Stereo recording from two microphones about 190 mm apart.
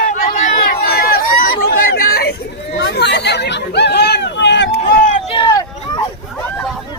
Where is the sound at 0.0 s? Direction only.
45° left (ahead or behind).